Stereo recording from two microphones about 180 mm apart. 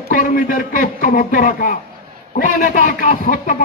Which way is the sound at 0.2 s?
50° left (ahead or behind).